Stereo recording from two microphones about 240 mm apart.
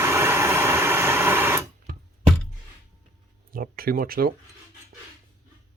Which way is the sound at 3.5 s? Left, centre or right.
Right.